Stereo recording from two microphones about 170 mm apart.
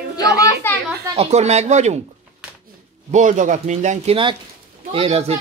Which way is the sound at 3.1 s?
45° right (ahead or behind).